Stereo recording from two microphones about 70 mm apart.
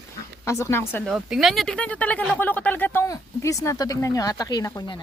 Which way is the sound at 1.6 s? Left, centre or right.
Centre.